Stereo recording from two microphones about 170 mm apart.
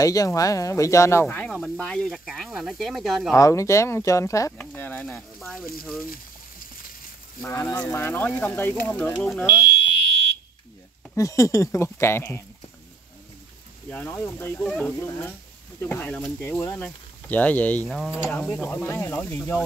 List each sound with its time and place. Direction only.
0.0 s speech: 20° left (ahead or behind); by 3.3 s centre (ahead or behind)
3.3 s speech: 20° left (ahead or behind); by 5.6 s centre (ahead or behind)
7.4 s speech: 15° left (ahead or behind)
11.1 s speech: 20° left (ahead or behind)
13.8 s speech: 10° left (ahead or behind)